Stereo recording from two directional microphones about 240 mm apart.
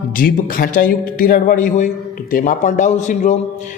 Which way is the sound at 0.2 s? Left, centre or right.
Left.